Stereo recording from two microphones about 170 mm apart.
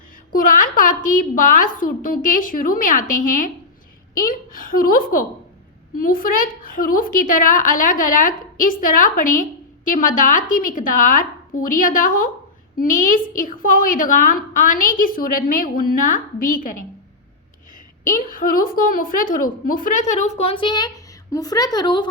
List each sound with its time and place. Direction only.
0.3 s a woman's voice: 55° left (ahead or behind)
18.3 s a woman's voice: 55° left (ahead or behind); by 22.1 s 25° left (ahead or behind)